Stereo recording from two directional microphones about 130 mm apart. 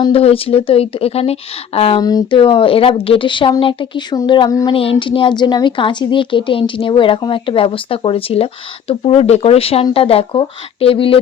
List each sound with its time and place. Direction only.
0.1 s speech: 45° left (ahead or behind)
2.0 s speech: 30° left (ahead or behind)
2.4 s speech: 45° left (ahead or behind)
4.7 s speech: 45° left (ahead or behind)